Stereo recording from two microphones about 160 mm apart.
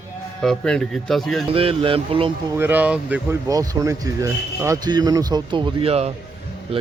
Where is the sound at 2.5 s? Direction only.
10° right (ahead or behind).